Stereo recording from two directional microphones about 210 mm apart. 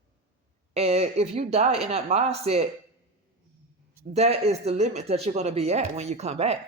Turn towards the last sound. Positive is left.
turn(degrees=-30)  # may be behind; listen again after turning